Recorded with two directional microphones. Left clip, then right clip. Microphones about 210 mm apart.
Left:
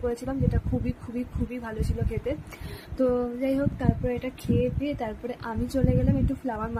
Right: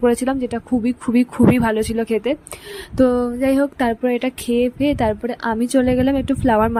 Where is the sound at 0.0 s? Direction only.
45° right (ahead or behind).